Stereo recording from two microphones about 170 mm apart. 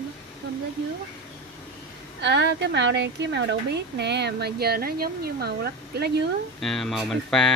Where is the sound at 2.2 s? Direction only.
90° right; by 6.1 s 70° right (ahead or behind).